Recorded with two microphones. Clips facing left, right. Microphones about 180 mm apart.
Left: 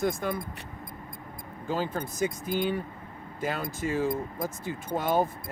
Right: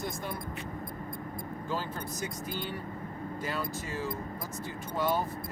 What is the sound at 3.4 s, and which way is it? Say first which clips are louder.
Speech: left 7 dB; 50° left (ahead or behind).